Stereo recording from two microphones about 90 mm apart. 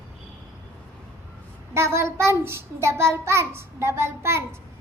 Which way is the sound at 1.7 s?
30° right (ahead or behind).